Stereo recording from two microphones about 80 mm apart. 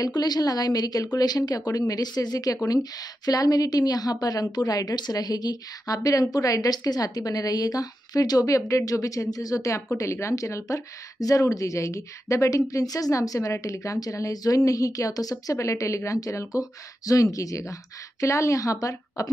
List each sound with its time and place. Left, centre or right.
0.0 s a woman's voice: left